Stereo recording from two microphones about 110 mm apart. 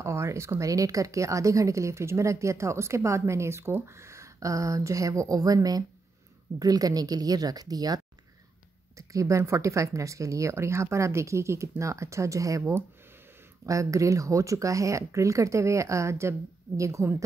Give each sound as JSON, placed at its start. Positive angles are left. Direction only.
{"t": 0.0, "sound": "speech", "side_deg": -25}